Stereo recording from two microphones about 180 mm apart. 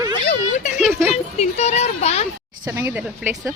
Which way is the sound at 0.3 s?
45° left (ahead or behind).